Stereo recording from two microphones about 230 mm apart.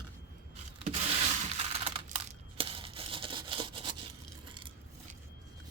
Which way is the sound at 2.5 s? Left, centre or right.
Right.